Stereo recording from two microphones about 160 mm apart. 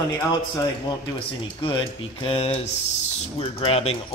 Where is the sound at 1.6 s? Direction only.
35° left (ahead or behind).